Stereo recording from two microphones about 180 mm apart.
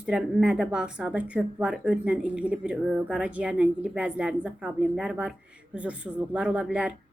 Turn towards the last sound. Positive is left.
turn(degrees=-5)  # may be behind; listen again after turning